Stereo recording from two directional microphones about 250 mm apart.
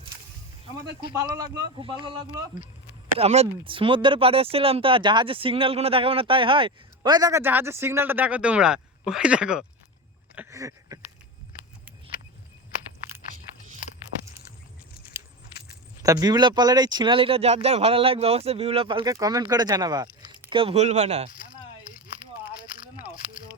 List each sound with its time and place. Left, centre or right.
1.0 s a man's voice: centre
16.0 s speech: centre
22.2 s a sound: left